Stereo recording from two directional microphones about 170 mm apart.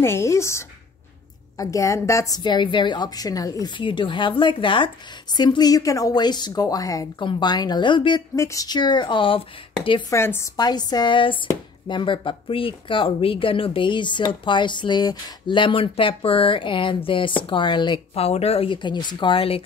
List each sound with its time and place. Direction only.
0.0 s a woman's voice: 15° left (ahead or behind)
10.1 s a woman's voice: 15° left (ahead or behind); by 19.6 s 35° left (ahead or behind)